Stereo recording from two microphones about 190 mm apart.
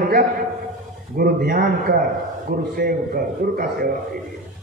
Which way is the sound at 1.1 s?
50° right (ahead or behind).